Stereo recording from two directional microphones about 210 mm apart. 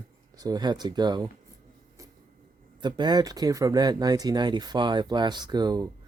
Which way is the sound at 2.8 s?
20° right (ahead or behind).